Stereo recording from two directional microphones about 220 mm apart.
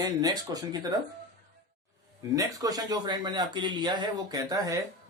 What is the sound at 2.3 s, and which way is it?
Speech, 15° right (ahead or behind).